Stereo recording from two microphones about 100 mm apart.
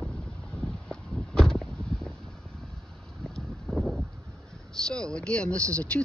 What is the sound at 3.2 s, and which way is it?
Boat, 5° left (ahead or behind).